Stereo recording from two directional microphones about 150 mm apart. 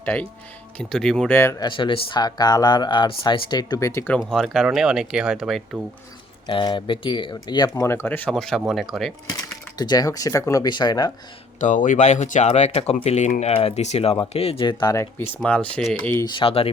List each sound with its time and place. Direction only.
0.0 s speech: 10° left (ahead or behind)
1.4 s speech: 15° left (ahead or behind)
1.6 s speech: 30° left (ahead or behind); by 4.2 s 15° left (ahead or behind)
4.2 s speech: centre (ahead or behind)
6.5 s speech: 35° left (ahead or behind)
7.7 s speech: 15° left (ahead or behind); by 9.1 s centre (ahead or behind)
9.7 s speech: 25° left (ahead or behind)
11.6 s speech: 60° left (ahead or behind); by 15.3 s 20° left (ahead or behind)
15.7 s speech: 5° left (ahead or behind)
16.2 s speech: 30° left (ahead or behind)